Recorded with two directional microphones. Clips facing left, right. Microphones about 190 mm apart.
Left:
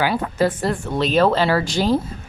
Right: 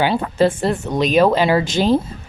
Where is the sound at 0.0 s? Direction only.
25° right (ahead or behind).